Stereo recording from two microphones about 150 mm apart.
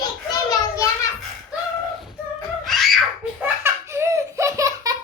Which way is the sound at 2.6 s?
Centre (ahead or behind).